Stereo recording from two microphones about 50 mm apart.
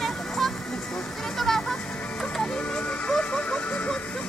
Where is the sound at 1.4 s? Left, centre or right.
Centre.